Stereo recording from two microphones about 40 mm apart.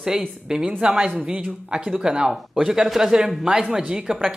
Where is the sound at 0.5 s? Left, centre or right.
Centre.